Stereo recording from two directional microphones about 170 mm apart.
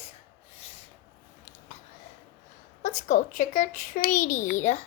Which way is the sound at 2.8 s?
45° left (ahead or behind).